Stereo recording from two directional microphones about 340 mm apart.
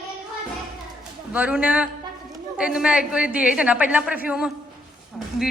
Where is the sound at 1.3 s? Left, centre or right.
Centre.